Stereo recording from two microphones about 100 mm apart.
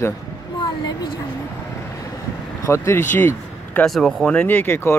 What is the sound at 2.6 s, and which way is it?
Speech, 30° left (ahead or behind).